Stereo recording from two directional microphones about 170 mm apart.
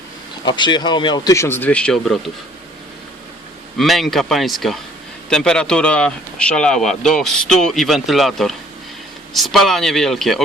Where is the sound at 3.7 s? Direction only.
Centre (ahead or behind).